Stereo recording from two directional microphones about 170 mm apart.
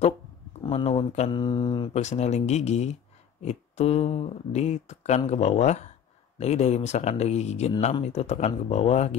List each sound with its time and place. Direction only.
0.6 s speech: 35° left (ahead or behind)
1.3 s mantra: 25° left (ahead or behind)
2.0 s speech: 40° left (ahead or behind)